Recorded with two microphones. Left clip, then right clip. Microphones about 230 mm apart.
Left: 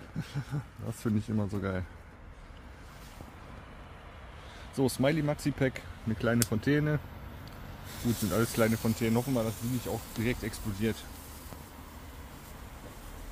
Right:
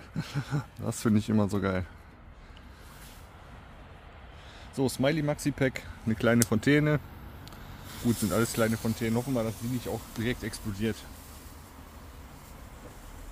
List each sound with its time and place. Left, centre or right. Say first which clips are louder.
0.2 s speech: right 6 dB; right
4.7 s speech: right 1 dB; centre; by 7.0 s right
7.9 s speech: right 3 dB; centre